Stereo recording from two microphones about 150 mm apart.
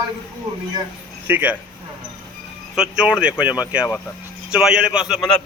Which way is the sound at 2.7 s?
5° right (ahead or behind).